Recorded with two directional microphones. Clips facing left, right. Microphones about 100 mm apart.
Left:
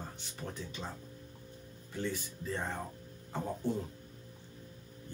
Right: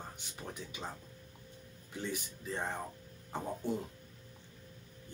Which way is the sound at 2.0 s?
15° right (ahead or behind).